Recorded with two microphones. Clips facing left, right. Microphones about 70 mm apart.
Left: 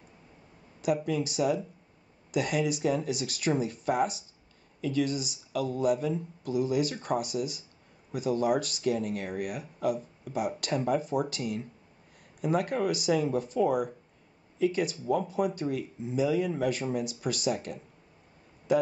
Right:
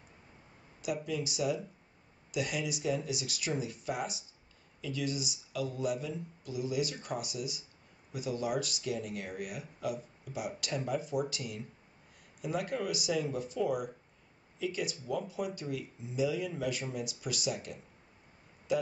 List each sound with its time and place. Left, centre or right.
0.8 s speech: left